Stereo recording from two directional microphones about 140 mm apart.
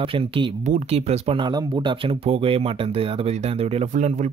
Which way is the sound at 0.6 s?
50° right (ahead or behind).